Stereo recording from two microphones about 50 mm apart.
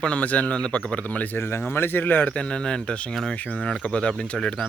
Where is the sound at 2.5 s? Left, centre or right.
Centre.